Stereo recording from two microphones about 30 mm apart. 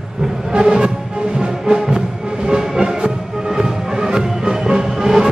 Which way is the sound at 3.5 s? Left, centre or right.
Right.